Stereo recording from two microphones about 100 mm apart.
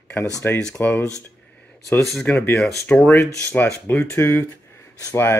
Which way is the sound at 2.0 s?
5° left (ahead or behind).